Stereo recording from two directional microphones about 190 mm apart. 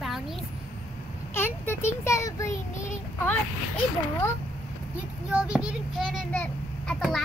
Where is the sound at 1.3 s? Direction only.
10° left (ahead or behind).